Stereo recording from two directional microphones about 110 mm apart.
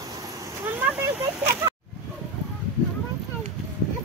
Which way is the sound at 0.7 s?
15° right (ahead or behind).